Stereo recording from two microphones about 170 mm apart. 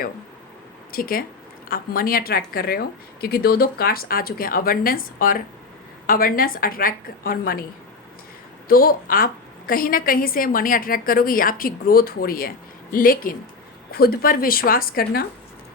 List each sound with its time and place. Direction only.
0.9 s a woman's voice: 60° left (ahead or behind)
8.6 s a woman's voice: 60° left (ahead or behind)